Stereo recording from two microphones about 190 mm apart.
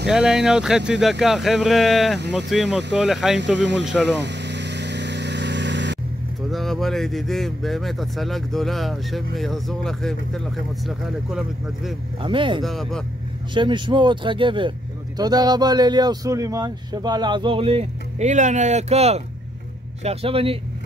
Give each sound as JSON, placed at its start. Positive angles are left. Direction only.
{"t": 0.1, "sound": "speech", "side_deg": -5}
{"t": 3.5, "sound": "speech", "side_deg": -65}
{"t": 4.0, "sound": "vehicle", "side_deg": -65}
{"t": 6.5, "sound": "speech", "side_deg": 0}
{"t": 12.2, "sound": "speech", "side_deg": -25}
{"t": 12.6, "sound": "speech", "side_deg": 0}
{"t": 13.6, "sound": "speech", "side_deg": -25}